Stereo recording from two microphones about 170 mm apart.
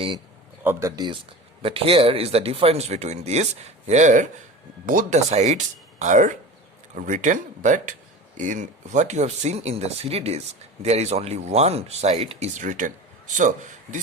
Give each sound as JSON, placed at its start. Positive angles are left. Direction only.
{"t": 0.6, "sound": "speech", "side_deg": -15}